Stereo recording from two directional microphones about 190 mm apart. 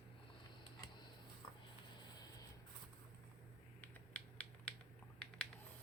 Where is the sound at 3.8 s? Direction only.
5° left (ahead or behind).